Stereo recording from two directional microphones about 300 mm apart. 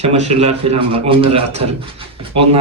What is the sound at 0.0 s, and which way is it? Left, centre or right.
Speech, right.